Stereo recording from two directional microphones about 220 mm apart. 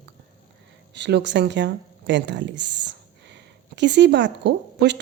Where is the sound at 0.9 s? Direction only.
50° right (ahead or behind).